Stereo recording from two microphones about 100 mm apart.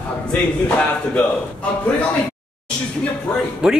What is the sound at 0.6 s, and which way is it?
Speech, 10° left (ahead or behind).